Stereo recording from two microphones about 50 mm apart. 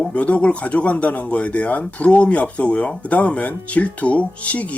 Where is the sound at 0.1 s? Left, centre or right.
Left.